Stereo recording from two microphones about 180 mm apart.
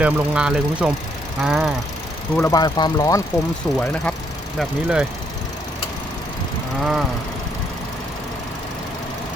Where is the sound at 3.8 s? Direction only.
5° left (ahead or behind).